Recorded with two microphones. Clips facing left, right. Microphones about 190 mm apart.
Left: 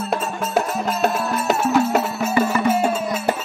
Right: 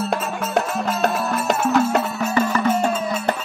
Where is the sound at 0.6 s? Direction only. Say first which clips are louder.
Left 1 dB; 5° left (ahead or behind).